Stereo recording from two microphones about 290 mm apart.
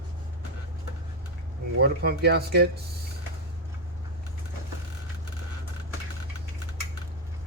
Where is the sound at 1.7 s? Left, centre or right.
Right.